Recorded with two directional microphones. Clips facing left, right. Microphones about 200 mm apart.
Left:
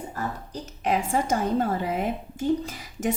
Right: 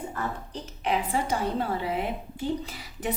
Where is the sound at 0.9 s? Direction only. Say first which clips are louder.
Left 3 dB; 45° left (ahead or behind).